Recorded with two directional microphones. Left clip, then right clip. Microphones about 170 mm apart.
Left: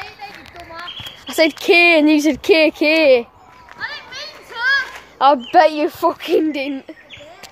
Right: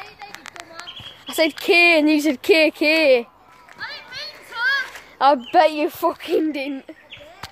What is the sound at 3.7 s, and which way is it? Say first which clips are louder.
Children playing: left 4 dB; 15° right (ahead or behind).